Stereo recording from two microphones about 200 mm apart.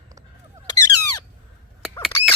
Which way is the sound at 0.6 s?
15° left (ahead or behind).